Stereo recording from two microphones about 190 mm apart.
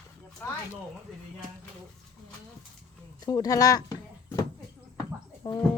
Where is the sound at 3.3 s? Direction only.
20° left (ahead or behind).